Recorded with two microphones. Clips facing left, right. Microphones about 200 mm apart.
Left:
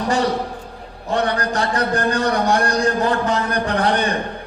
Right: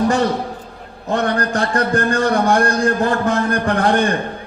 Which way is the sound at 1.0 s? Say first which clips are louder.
Right 2 dB; 45° right (ahead or behind).